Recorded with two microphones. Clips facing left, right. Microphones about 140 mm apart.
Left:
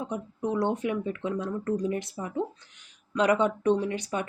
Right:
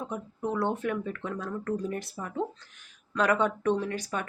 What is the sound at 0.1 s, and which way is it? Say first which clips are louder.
Speech: left 2 dB; 20° left (ahead or behind).